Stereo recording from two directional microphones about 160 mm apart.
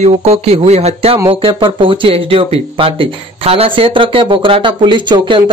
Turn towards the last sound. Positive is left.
turn(degrees=-30)  # may be behind; listen again after turning